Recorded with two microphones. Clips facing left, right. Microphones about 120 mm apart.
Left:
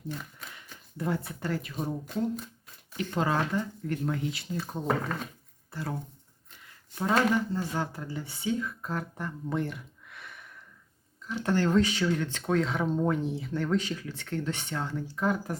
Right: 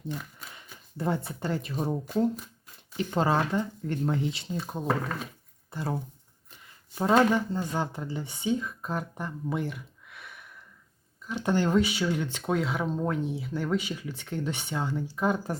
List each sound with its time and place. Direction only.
0.9 s speech: 30° right (ahead or behind)
3.2 s speech: 30° right (ahead or behind)
4.7 s speech: 5° right (ahead or behind)
5.7 s speech: 25° right (ahead or behind)
7.0 s speech: 25° right (ahead or behind)
9.6 s gasp: centre (ahead or behind)
11.4 s speech: 15° right (ahead or behind)